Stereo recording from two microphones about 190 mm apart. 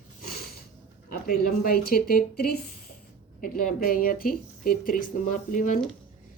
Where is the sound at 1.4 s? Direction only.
55° left (ahead or behind).